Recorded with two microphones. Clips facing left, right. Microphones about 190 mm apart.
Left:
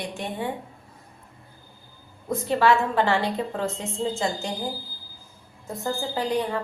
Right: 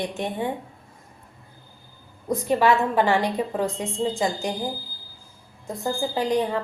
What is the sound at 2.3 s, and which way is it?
A woman's voice, 15° right (ahead or behind).